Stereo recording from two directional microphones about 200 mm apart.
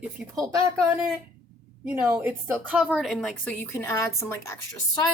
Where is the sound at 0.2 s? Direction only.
5° right (ahead or behind).